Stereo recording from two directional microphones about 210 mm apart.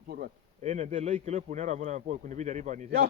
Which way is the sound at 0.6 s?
35° right (ahead or behind).